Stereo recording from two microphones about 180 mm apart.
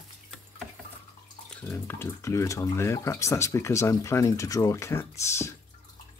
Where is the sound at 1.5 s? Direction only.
10° left (ahead or behind).